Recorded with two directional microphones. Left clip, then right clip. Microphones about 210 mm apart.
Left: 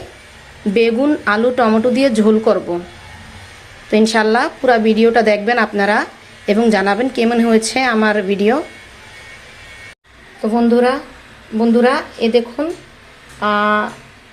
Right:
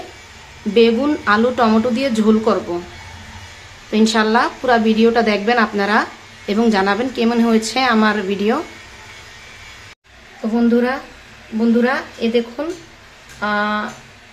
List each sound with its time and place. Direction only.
0.7 s a woman's voice: 20° left (ahead or behind)
3.9 s a woman's voice: 20° left (ahead or behind)
10.5 s a woman's voice: 15° left (ahead or behind)